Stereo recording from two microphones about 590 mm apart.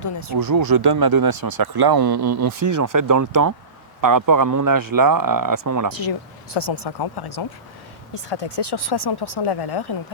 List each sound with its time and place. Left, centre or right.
0.3 s speech: right
6.0 s speech: left